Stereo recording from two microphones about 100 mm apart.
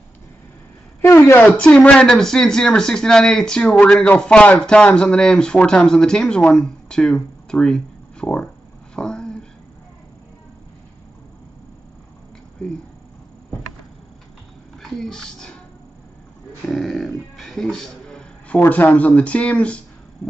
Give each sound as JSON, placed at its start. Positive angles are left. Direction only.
{"t": 1.0, "sound": "a woman's voice", "side_deg": 25}
{"t": 1.6, "sound": "speech", "side_deg": 10}
{"t": 8.9, "sound": "a sound", "side_deg": 5}
{"t": 14.8, "sound": "a sound", "side_deg": 5}
{"t": 16.6, "sound": "music", "side_deg": 0}
{"t": 18.6, "sound": "speech", "side_deg": 15}